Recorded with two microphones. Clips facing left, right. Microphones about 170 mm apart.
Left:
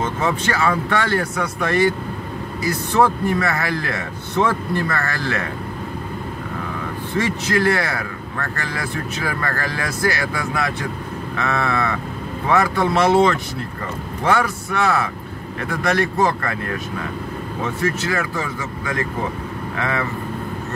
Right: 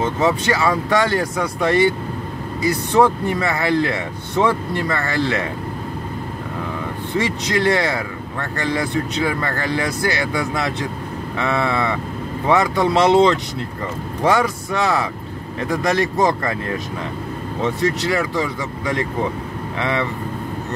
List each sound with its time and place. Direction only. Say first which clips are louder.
0.0 s a man's voice: right 3 dB; 15° right (ahead or behind)
3.0 s a man's voice: right 1 dB; 20° right (ahead or behind)
7.2 s speech: even; 20° right (ahead or behind)
11.3 s a man's voice: right 2 dB; 15° right (ahead or behind)
17.7 s a man's voice: right 1 dB; 15° right (ahead or behind)